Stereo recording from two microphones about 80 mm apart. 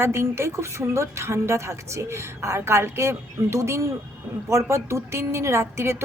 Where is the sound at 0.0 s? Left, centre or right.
Right.